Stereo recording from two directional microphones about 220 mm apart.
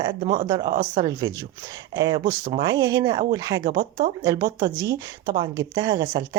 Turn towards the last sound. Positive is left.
turn(degrees=-20)  # may be behind; listen again after turning